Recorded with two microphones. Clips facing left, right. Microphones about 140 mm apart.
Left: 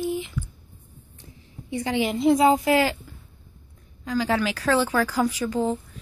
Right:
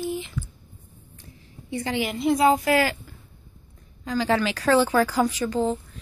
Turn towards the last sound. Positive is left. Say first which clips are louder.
# even
turn(degrees=10)  # may be behind; listen again after turning